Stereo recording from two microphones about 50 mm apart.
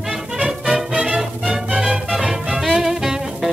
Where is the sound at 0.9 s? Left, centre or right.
Centre.